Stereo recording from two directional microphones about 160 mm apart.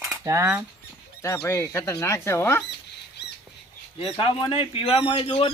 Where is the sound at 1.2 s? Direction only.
15° left (ahead or behind).